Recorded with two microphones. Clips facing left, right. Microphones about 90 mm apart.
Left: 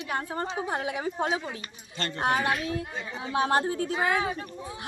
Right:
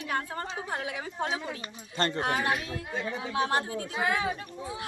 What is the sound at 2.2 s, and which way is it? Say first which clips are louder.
A woman's voice: left 6 dB; 25° left (ahead or behind).